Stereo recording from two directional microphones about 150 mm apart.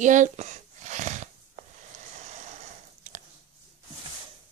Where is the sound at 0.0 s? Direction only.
55° right (ahead or behind).